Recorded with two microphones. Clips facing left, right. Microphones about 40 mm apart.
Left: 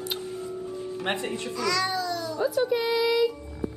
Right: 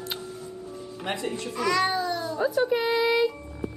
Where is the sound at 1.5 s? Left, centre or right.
Right.